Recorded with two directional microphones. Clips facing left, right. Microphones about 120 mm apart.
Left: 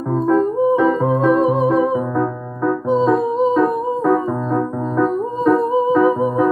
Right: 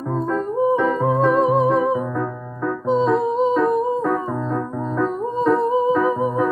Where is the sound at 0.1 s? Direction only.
10° left (ahead or behind).